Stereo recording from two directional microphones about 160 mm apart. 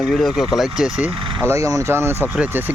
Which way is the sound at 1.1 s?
30° right (ahead or behind).